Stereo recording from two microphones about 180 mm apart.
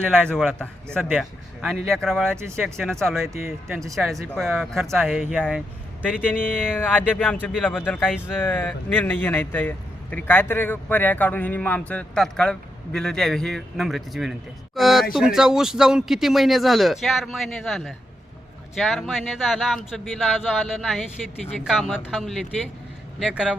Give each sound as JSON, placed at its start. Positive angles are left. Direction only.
{"t": 0.1, "sound": "a man's voice", "side_deg": 5}
{"t": 2.4, "sound": "speech", "side_deg": -15}
{"t": 2.6, "sound": "a man's voice", "side_deg": 5}
{"t": 3.3, "sound": "speech", "side_deg": -15}
{"t": 3.9, "sound": "a man's voice", "side_deg": 0}
{"t": 6.7, "sound": "a man's voice", "side_deg": 10}